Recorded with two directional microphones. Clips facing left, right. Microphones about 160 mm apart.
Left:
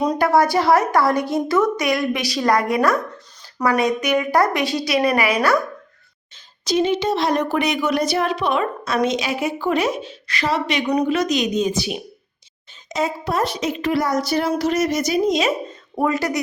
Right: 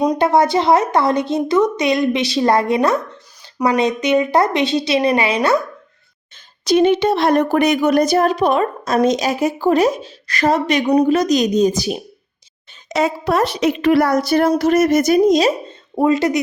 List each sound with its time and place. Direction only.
0.2 s speech: 20° right (ahead or behind)
6.3 s speech: 60° right (ahead or behind); by 12.0 s 40° right (ahead or behind)
12.9 s a woman's voice: 75° right (ahead or behind); by 15.4 s 50° right (ahead or behind)
15.4 s speech: 30° right (ahead or behind)